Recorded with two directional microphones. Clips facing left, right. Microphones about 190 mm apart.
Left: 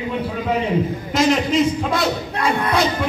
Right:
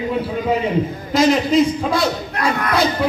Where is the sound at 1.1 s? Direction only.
Centre (ahead or behind).